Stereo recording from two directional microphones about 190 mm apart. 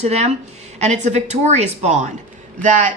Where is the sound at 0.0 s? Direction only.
35° right (ahead or behind).